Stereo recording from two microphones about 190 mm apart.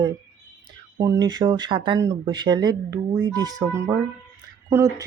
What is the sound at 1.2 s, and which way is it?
Speech, 20° right (ahead or behind).